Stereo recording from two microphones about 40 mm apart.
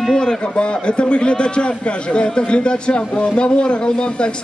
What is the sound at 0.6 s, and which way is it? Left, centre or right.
Speech, left.